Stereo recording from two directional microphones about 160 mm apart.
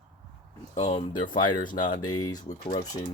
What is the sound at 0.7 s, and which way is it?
Speech, 35° left (ahead or behind).